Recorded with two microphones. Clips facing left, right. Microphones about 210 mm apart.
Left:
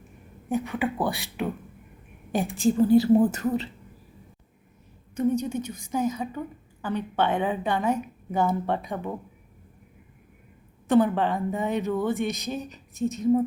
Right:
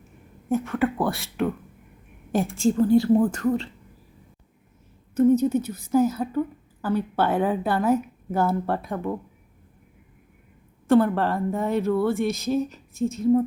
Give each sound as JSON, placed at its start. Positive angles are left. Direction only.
{"t": 0.4, "sound": "a woman's voice", "side_deg": 0}
{"t": 5.1, "sound": "a woman's voice", "side_deg": -5}
{"t": 10.8, "sound": "a woman's voice", "side_deg": 0}
{"t": 11.9, "sound": "speech", "side_deg": 20}
{"t": 12.2, "sound": "a woman's voice", "side_deg": 0}